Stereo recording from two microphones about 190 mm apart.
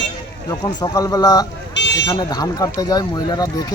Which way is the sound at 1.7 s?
70° left (ahead or behind).